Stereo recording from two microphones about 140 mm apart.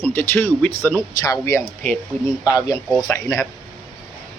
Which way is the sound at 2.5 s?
10° right (ahead or behind).